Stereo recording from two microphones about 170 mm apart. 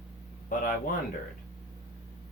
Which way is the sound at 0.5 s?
55° left (ahead or behind).